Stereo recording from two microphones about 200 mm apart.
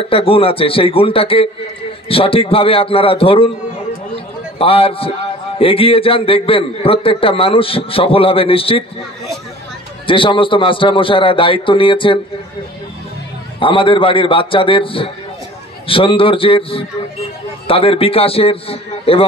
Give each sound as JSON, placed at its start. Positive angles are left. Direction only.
{"t": 0.1, "sound": "a man's voice", "side_deg": 25}
{"t": 4.1, "sound": "a sound", "side_deg": 30}
{"t": 5.6, "sound": "a man's voice", "side_deg": 25}
{"t": 10.0, "sound": "a man's voice", "side_deg": 25}
{"t": 13.6, "sound": "a man's voice", "side_deg": 25}